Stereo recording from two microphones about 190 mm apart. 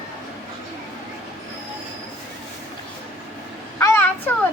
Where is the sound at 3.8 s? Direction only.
10° left (ahead or behind).